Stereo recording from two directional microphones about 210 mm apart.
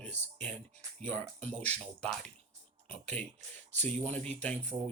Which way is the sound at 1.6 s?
5° left (ahead or behind).